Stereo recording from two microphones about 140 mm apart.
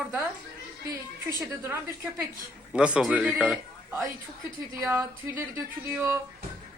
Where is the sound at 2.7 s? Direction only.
5° right (ahead or behind).